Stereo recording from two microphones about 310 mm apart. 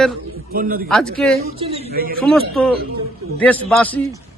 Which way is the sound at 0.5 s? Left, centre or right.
Right.